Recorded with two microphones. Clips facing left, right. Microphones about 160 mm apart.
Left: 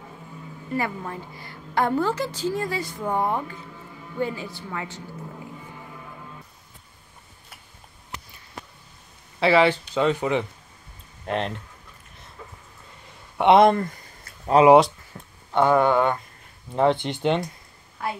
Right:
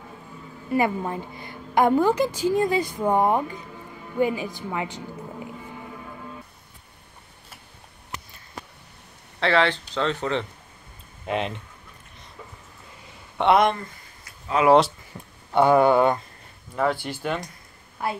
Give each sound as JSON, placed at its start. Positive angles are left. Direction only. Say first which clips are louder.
{"t": 0.7, "sound": "a woman's voice", "louder": "right 5 dB", "side_deg": -20}
{"t": 9.4, "sound": "speech", "louder": "left 3 dB", "side_deg": 10}
{"t": 11.2, "sound": "speech", "louder": "even", "side_deg": -5}
{"t": 13.4, "sound": "speech", "louder": "left 2 dB", "side_deg": 5}
{"t": 14.6, "sound": "speech", "louder": "left 5 dB", "side_deg": 35}
{"t": 15.1, "sound": "speech", "louder": "right 1 dB", "side_deg": -10}
{"t": 16.7, "sound": "speech", "louder": "left 4 dB", "side_deg": 25}